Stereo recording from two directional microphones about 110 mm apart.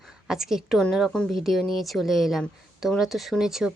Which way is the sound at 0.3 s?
5° right (ahead or behind).